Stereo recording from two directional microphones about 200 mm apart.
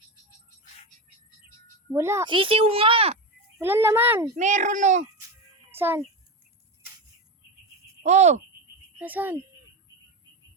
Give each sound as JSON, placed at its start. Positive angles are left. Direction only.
{"t": 1.9, "sound": "a child's voice", "side_deg": -15}
{"t": 3.6, "sound": "a child's voice", "side_deg": -10}
{"t": 4.4, "sound": "a child's voice", "side_deg": -35}
{"t": 5.7, "sound": "a child's voice", "side_deg": -10}
{"t": 8.0, "sound": "a child's voice", "side_deg": -35}
{"t": 9.0, "sound": "speech", "side_deg": -10}